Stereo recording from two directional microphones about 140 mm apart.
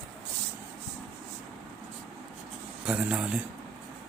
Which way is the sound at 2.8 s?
10° right (ahead or behind).